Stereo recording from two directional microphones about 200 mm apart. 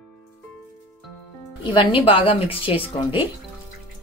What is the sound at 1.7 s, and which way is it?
Speech, 25° left (ahead or behind).